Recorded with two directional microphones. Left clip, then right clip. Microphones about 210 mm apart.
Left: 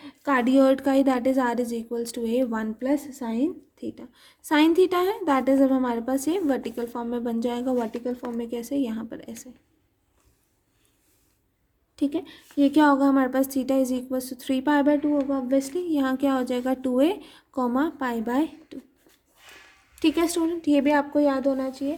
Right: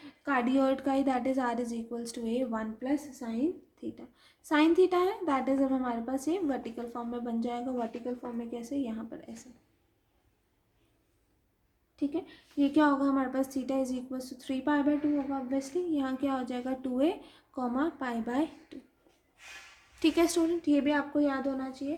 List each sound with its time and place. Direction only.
0.3 s a woman's voice: 50° left (ahead or behind)
11.9 s a woman's voice: 50° left (ahead or behind)
20.0 s a woman's voice: 35° left (ahead or behind)